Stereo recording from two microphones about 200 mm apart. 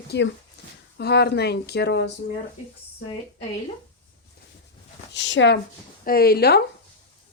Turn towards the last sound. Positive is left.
turn(degrees=55)  # may be behind; listen again after turning